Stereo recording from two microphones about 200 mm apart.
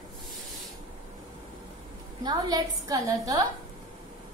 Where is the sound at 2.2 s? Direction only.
20° right (ahead or behind).